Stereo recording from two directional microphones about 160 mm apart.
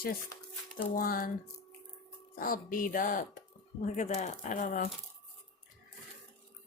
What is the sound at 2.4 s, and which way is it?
Speech, 60° left (ahead or behind).